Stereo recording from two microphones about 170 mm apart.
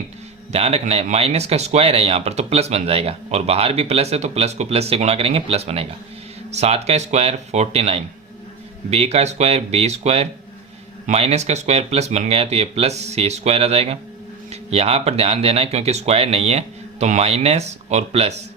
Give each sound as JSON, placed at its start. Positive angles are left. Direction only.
{"t": 0.5, "sound": "speech", "side_deg": -40}